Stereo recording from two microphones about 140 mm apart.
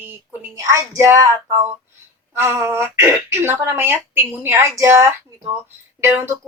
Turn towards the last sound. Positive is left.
turn(degrees=-15)  # may be behind; listen again after turning